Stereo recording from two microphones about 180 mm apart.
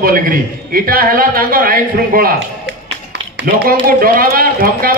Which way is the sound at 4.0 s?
50° right (ahead or behind).